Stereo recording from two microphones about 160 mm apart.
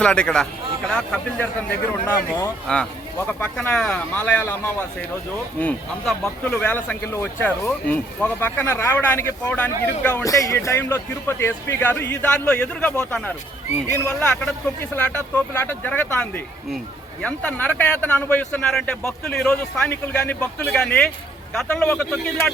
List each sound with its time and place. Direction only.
0.0 s a man's voice: 5° left (ahead or behind)
10.2 s speech: 20° left (ahead or behind)
13.8 s a man's voice: 15° left (ahead or behind)